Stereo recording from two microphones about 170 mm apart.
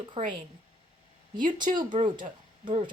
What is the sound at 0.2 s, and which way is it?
Speech, 35° right (ahead or behind).